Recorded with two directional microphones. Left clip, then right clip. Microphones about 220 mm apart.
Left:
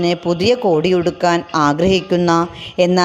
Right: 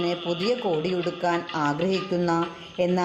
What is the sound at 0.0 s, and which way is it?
Speech, 40° left (ahead or behind).